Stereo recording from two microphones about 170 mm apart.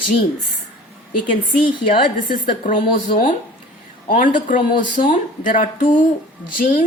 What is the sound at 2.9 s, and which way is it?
Speech, 50° left (ahead or behind).